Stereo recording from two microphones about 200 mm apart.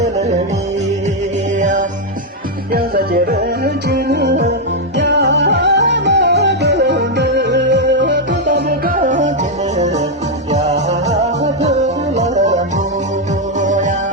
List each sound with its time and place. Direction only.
1.5 s music: 40° right (ahead or behind)
2.7 s music: 50° right (ahead or behind)